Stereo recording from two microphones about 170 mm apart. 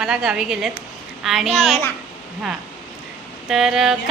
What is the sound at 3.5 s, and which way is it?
Speech, centre (ahead or behind).